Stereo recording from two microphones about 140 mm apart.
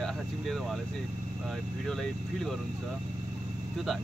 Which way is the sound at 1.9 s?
5° left (ahead or behind).